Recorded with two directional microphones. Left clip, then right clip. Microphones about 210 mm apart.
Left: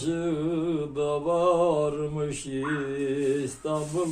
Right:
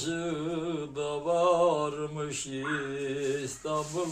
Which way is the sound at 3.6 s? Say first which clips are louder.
Left 3 dB; 10° right (ahead or behind).